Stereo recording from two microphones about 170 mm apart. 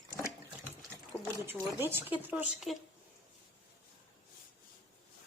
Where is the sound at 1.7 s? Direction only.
10° right (ahead or behind).